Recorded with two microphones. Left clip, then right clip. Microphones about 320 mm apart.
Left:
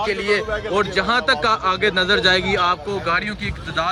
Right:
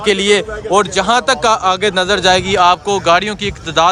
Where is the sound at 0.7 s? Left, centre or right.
Centre.